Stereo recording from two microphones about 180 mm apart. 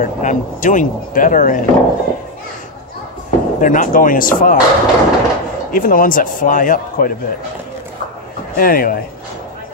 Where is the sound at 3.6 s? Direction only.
45° left (ahead or behind).